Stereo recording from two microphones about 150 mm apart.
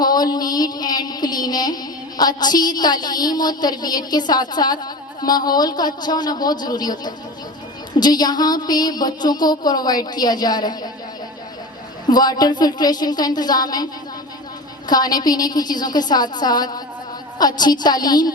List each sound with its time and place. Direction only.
0.0 s music: 25° left (ahead or behind)
12.1 s music: 25° left (ahead or behind)
14.8 s music: 25° left (ahead or behind)